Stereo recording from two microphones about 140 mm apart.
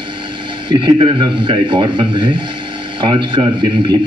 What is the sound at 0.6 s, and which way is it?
A man's voice, 40° right (ahead or behind).